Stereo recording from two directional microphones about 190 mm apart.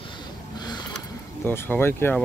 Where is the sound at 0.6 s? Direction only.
20° left (ahead or behind).